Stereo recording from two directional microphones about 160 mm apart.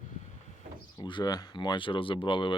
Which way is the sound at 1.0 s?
30° left (ahead or behind).